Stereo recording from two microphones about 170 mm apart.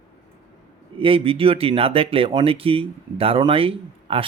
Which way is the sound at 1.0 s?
30° right (ahead or behind).